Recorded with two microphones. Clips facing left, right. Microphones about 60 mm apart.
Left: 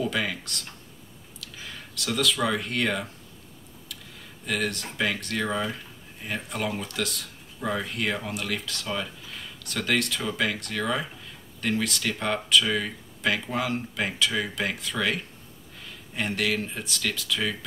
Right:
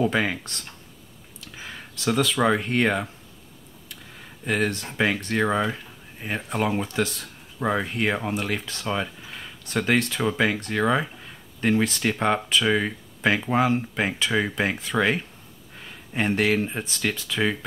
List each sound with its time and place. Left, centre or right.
0.0 s speech: right
4.5 s speech: right